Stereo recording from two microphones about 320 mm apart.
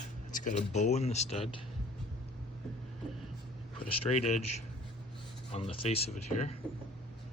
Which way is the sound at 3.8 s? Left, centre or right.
Left.